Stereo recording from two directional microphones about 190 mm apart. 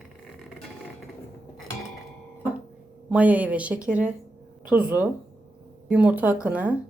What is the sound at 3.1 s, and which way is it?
Speech, 5° right (ahead or behind).